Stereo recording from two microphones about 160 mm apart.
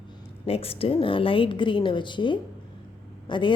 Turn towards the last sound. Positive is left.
turn(degrees=30)  # may be behind; listen again after turning